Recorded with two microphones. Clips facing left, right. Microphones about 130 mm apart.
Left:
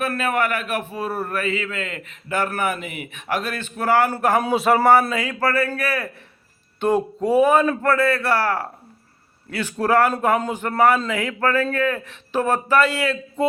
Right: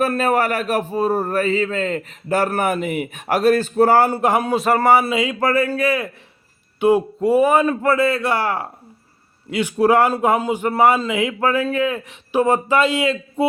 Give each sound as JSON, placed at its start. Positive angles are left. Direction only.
{"t": 0.0, "sound": "a man's voice", "side_deg": -35}
{"t": 4.1, "sound": "speech", "side_deg": -15}
{"t": 4.4, "sound": "speech", "side_deg": 0}
{"t": 6.7, "sound": "speech", "side_deg": -10}